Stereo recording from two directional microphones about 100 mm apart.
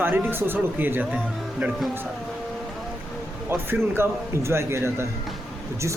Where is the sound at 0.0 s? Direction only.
20° right (ahead or behind).